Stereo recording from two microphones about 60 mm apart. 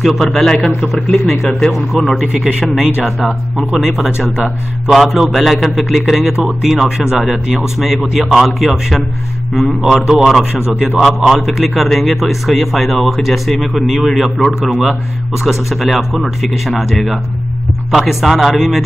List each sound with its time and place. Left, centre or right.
0.0 s a man's voice: centre
2.3 s a man's voice: centre